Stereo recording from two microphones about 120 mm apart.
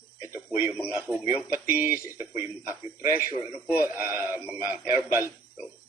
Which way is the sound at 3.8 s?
20° right (ahead or behind).